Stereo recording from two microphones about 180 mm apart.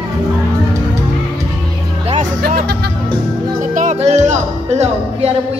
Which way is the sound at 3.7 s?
40° right (ahead or behind).